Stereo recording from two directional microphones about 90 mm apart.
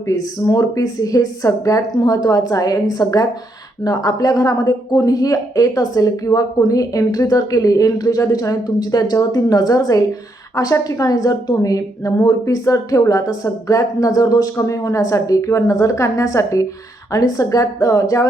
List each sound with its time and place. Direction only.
0.1 s a woman's voice: 40° left (ahead or behind)